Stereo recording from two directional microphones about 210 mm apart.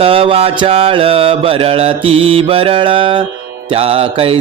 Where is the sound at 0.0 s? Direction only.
25° right (ahead or behind).